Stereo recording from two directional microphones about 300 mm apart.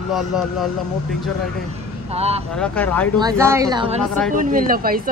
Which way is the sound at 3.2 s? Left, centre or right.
Centre.